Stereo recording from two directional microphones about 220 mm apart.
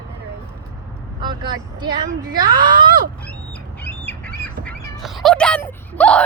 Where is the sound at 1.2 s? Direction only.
20° right (ahead or behind).